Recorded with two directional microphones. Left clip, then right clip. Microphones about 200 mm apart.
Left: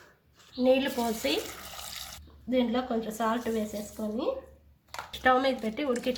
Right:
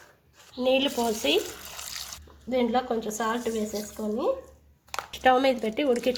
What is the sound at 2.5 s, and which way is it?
A woman's voice, 35° right (ahead or behind).